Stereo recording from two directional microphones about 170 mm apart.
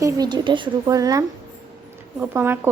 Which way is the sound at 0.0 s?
25° right (ahead or behind).